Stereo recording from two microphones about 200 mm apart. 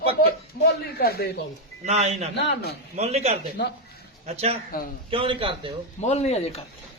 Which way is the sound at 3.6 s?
55° left (ahead or behind).